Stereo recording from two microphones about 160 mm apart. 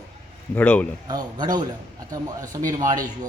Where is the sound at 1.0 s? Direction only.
25° right (ahead or behind).